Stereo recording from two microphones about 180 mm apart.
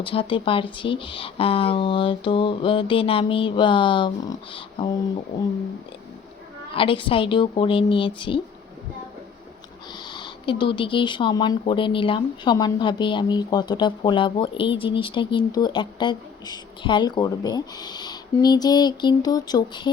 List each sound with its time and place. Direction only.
0.0 s speech: 30° left (ahead or behind)
6.7 s speech: 30° left (ahead or behind)
10.1 s speech: 25° left (ahead or behind)